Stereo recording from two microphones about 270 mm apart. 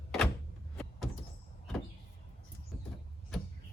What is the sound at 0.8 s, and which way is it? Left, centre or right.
Sliding door, centre.